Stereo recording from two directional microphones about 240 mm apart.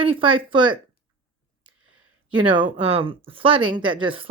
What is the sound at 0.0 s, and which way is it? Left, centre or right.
Speech, right.